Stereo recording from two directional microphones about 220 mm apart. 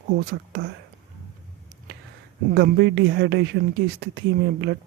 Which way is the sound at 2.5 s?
50° right (ahead or behind).